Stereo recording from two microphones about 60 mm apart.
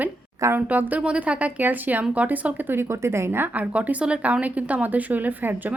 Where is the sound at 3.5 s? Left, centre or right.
Right.